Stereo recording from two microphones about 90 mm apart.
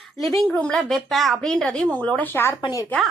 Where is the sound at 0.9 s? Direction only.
Centre (ahead or behind).